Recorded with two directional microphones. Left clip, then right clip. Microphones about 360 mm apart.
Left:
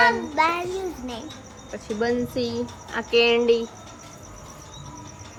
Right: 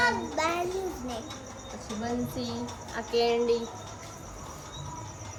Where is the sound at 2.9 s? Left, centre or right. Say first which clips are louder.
Left 7 dB; centre.